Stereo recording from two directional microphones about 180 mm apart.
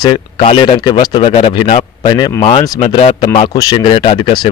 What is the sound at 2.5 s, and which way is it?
Speech, 35° left (ahead or behind).